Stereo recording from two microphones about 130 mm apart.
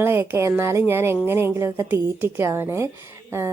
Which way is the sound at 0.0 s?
20° right (ahead or behind).